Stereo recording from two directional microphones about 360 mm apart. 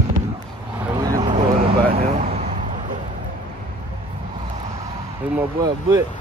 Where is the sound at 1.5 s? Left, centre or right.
Right.